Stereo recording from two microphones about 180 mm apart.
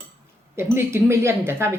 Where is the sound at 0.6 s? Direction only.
15° right (ahead or behind).